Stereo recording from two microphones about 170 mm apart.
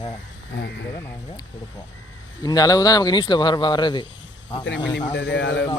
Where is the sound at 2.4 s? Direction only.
20° left (ahead or behind).